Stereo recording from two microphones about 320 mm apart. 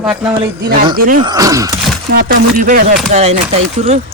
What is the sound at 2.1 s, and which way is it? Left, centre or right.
Speech, right.